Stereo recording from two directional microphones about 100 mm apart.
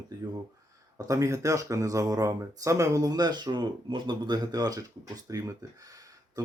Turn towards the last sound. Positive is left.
turn(degrees=-35)  # may be behind; listen again after turning